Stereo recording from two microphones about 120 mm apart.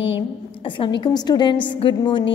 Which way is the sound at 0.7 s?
40° left (ahead or behind).